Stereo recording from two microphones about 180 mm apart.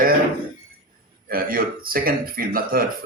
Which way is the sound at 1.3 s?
55° right (ahead or behind).